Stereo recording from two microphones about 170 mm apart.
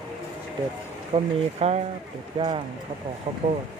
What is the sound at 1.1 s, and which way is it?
Speech, 30° right (ahead or behind).